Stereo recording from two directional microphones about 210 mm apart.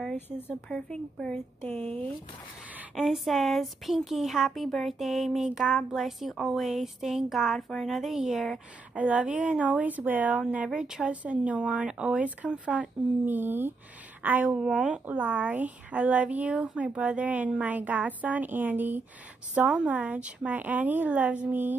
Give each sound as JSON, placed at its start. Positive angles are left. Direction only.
{"t": 0.0, "sound": "speech", "side_deg": 5}
{"t": 1.6, "sound": "speech", "side_deg": -30}
{"t": 3.0, "sound": "speech", "side_deg": 0}